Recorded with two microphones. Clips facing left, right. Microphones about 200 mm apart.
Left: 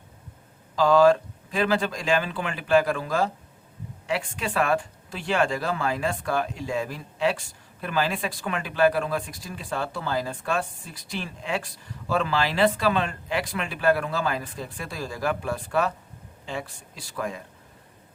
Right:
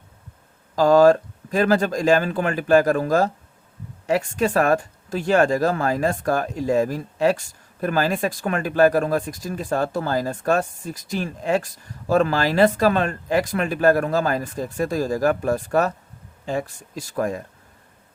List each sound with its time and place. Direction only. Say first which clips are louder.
0.8 s speech: right 4 dB; 45° right (ahead or behind)